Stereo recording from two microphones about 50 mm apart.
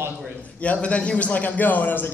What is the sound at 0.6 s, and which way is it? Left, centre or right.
A man's voice, left.